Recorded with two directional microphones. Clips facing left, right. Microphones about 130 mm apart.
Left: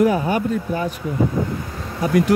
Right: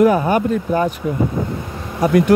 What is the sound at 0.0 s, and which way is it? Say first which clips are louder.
Speech: right 4 dB; 55° right (ahead or behind).